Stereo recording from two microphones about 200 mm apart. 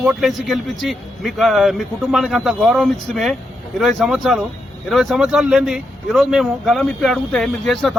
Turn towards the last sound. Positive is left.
turn(degrees=0)  # may be behind; listen again after turning